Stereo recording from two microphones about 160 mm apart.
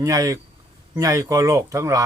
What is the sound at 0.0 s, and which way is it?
Speech, 20° right (ahead or behind).